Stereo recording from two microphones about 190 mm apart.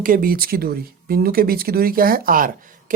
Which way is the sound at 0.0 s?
50° right (ahead or behind).